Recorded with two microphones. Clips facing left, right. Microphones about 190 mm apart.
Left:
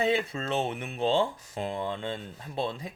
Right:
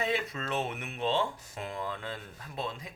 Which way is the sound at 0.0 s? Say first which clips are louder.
Left 5 dB; 30° left (ahead or behind).